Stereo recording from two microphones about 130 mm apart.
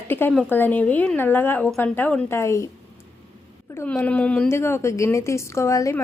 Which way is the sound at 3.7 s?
15° left (ahead or behind).